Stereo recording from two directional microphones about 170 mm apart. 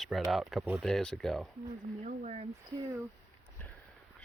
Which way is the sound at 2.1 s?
45° right (ahead or behind).